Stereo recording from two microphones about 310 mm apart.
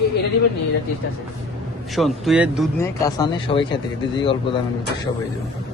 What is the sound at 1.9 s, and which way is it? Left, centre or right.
Speech, centre.